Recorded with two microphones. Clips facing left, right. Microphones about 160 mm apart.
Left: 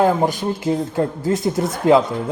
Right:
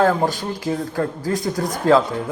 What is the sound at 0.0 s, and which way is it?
Speech, 20° left (ahead or behind).